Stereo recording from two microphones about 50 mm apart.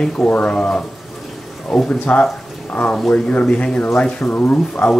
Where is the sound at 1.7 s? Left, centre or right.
Centre.